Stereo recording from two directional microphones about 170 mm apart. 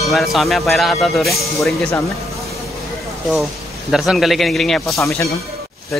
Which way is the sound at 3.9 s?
Centre (ahead or behind).